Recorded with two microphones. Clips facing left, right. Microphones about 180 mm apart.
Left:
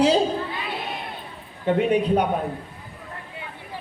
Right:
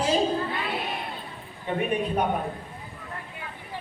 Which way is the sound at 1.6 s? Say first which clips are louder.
Left 7 dB; 80° left.